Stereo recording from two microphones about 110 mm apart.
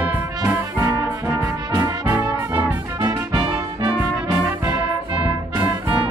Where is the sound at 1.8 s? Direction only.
15° right (ahead or behind).